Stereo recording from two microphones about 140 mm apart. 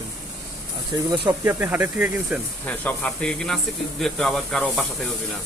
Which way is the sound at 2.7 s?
10° left (ahead or behind).